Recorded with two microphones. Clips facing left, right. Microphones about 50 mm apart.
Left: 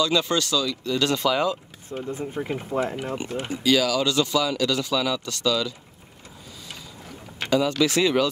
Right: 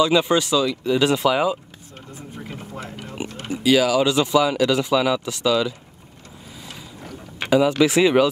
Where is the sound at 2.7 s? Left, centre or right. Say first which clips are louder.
Left 11 dB; left.